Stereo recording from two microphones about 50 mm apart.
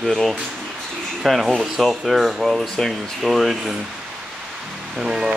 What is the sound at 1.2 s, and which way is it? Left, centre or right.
Speech, centre.